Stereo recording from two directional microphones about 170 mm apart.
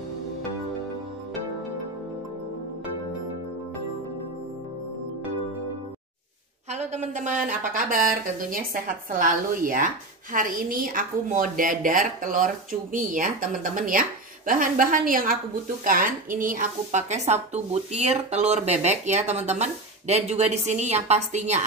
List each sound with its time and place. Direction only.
6.7 s a woman's voice: 45° right (ahead or behind)